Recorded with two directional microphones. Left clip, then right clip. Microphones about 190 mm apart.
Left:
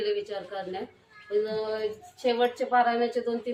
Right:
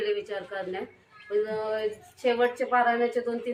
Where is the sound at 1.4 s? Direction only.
15° left (ahead or behind).